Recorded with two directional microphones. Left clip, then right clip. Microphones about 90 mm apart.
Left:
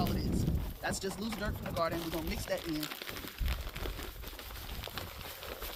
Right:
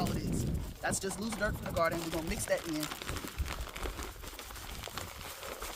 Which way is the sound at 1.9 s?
15° left (ahead or behind).